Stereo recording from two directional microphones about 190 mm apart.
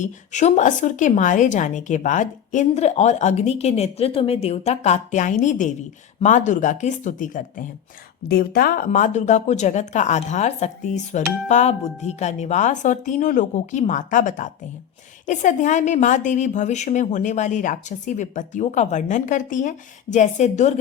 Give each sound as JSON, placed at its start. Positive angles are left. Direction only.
{"t": 0.0, "sound": "a woman's voice", "side_deg": 40}